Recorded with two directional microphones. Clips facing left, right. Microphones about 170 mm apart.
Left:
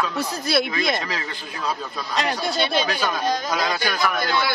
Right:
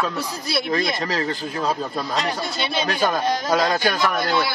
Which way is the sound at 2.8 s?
45° right (ahead or behind).